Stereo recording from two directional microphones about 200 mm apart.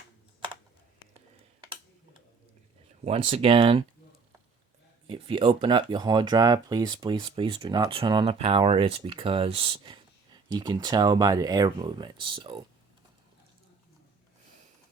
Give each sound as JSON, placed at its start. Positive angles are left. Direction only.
{"t": 3.0, "sound": "speech", "side_deg": -30}
{"t": 5.0, "sound": "speech", "side_deg": -25}